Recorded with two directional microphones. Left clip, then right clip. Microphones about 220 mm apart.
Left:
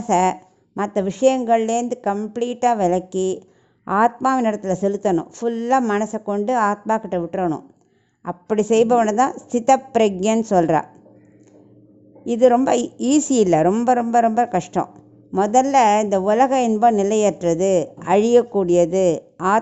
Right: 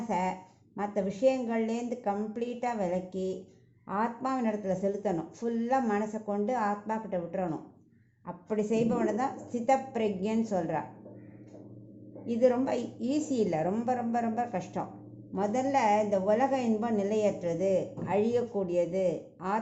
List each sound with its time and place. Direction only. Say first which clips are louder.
0.1 s a woman's voice: left 15 dB; 50° left (ahead or behind)
12.2 s a woman's voice: left 12 dB; 50° left (ahead or behind)